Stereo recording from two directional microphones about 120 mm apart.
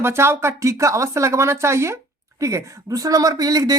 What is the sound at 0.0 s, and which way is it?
Speech, 20° right (ahead or behind).